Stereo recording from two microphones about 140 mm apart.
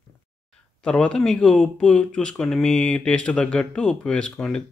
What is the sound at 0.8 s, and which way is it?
Speech, 5° left (ahead or behind).